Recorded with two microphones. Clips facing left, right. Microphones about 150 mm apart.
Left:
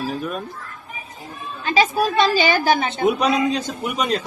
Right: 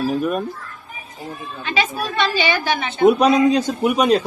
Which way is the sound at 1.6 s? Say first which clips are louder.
Left 4 dB; 40° left (ahead or behind).